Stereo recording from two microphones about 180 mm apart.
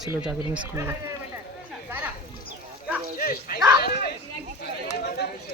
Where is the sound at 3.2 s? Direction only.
50° left (ahead or behind).